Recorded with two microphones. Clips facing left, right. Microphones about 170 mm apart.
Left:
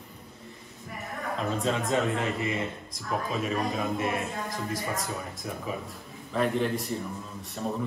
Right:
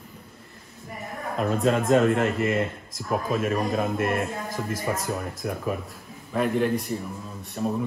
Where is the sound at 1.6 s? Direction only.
55° right (ahead or behind).